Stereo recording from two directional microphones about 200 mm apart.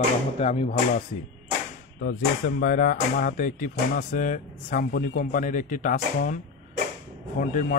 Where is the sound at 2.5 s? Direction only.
45° left (ahead or behind).